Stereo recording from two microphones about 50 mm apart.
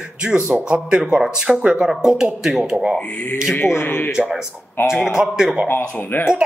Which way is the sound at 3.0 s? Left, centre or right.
Left.